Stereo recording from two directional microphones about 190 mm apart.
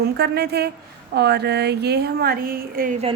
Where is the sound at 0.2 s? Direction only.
55° right (ahead or behind).